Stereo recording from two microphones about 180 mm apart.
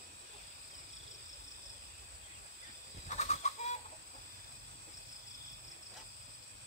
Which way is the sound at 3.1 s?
40° left (ahead or behind).